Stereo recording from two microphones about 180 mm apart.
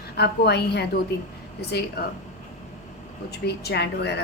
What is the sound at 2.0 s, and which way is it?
Speech, 65° left (ahead or behind).